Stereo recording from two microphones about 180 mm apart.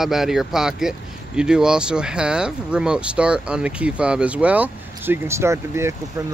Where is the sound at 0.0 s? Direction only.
Centre (ahead or behind).